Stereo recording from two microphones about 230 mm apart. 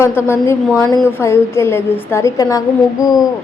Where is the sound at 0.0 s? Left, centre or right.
Centre.